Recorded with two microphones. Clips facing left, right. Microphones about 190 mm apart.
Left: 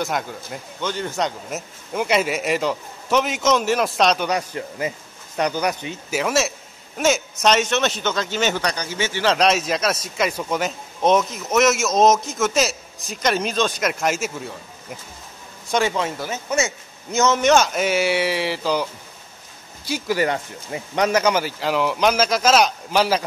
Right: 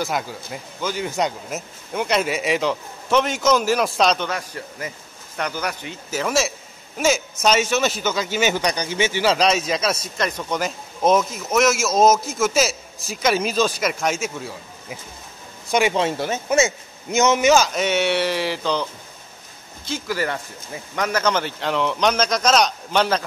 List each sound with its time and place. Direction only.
0.0 s speech: 5° right (ahead or behind)
4.3 s speech: 20° left (ahead or behind); by 15.0 s centre (ahead or behind)
15.7 s speech: 15° right (ahead or behind); by 23.2 s 5° left (ahead or behind)